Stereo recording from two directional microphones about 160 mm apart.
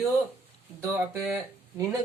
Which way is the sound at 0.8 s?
15° right (ahead or behind).